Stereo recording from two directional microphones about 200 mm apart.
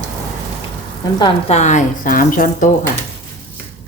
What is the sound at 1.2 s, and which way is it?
A woman's voice, 35° left (ahead or behind).